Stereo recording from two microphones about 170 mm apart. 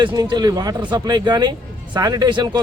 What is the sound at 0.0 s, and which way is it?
A man's voice, 25° right (ahead or behind).